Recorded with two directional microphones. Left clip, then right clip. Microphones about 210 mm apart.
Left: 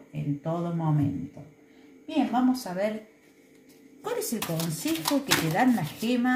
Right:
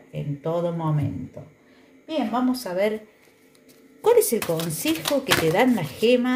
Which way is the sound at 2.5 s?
50° right (ahead or behind).